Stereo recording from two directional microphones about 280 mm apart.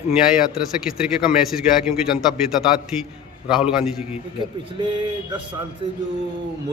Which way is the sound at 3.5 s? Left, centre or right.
Centre.